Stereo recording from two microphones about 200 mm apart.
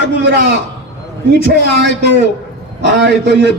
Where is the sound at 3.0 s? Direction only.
60° right (ahead or behind).